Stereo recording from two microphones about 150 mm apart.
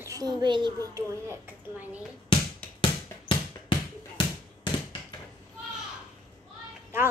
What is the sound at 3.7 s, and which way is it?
Basketball bounce, 35° left (ahead or behind).